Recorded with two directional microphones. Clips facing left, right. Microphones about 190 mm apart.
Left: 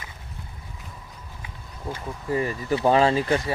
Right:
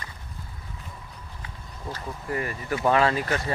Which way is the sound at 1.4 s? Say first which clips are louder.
Left 3 dB; 10° left (ahead or behind).